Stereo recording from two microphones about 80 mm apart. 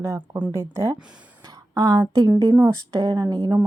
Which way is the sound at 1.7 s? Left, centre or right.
Right.